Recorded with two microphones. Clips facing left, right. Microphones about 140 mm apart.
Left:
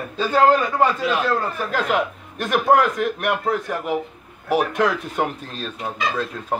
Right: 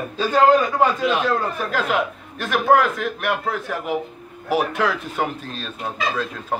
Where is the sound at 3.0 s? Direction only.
Centre (ahead or behind).